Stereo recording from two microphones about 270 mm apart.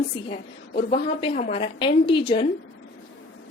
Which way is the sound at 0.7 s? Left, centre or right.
Left.